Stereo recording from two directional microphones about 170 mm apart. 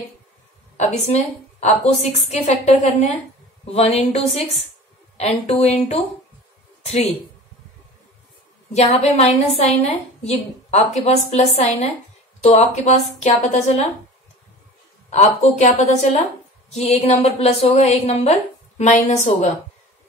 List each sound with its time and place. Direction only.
0.7 s a woman's voice: 40° left (ahead or behind)
8.7 s a woman's voice: 40° left (ahead or behind)
15.0 s a woman's voice: 40° left (ahead or behind)